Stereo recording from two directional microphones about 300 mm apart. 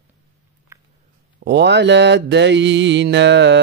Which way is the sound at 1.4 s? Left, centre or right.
Right.